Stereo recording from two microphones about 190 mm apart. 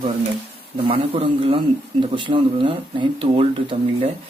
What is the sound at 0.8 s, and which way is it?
Speech, 30° right (ahead or behind).